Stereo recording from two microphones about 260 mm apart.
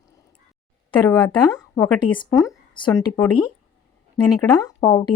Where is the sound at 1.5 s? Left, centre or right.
Centre.